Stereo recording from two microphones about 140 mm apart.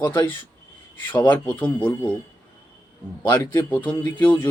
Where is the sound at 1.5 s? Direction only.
35° left (ahead or behind).